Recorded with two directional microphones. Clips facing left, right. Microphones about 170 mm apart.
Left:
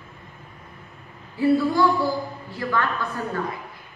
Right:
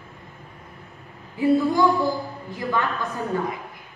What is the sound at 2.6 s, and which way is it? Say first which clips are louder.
Speech: even; 10° right (ahead or behind).